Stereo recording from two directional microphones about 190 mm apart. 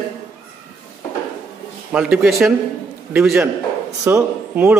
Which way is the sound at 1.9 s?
5° right (ahead or behind).